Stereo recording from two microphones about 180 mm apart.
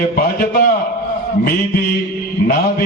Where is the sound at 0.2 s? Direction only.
55° left (ahead or behind).